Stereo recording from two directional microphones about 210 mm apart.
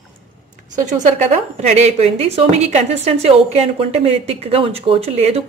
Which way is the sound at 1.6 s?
30° right (ahead or behind).